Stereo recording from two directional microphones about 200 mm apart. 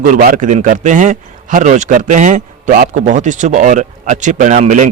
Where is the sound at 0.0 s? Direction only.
40° right (ahead or behind).